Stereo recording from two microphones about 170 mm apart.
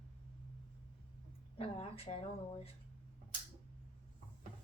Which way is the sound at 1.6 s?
35° left (ahead or behind).